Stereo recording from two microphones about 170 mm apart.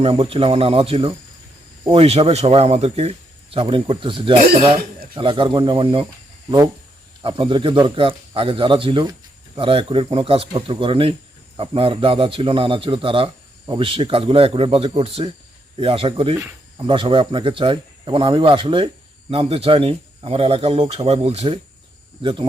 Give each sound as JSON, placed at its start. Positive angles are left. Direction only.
{"t": 0.0, "sound": "speech", "side_deg": -35}
{"t": 7.2, "sound": "speech", "side_deg": -30}